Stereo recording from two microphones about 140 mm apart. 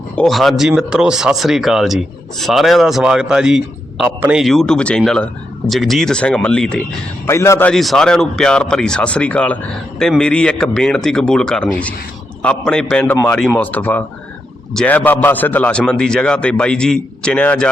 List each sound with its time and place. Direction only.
0.2 s speech: centre (ahead or behind)
7.3 s a man's voice: 20° left (ahead or behind)
7.7 s a man's voice: 5° left (ahead or behind)